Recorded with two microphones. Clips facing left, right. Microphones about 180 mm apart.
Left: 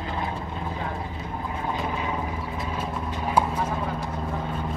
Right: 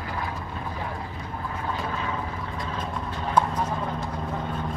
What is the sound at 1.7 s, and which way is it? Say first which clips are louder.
Vehicle: left 2 dB; 15° left (ahead or behind).